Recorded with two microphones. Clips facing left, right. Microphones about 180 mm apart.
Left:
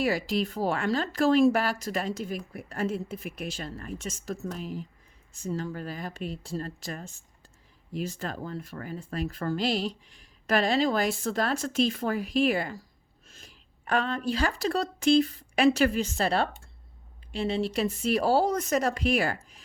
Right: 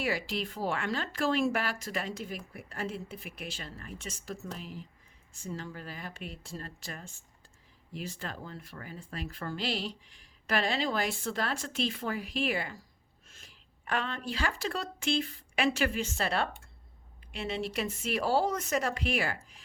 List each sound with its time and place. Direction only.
0.0 s speech: 40° left (ahead or behind)